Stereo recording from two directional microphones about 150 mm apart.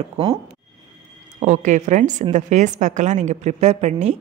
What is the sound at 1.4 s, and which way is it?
A woman's voice, 55° right (ahead or behind).